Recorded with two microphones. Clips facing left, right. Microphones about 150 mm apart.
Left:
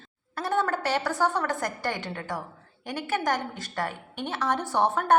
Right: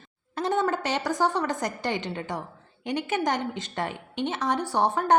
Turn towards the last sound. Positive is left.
turn(degrees=-15)  # may be behind; listen again after turning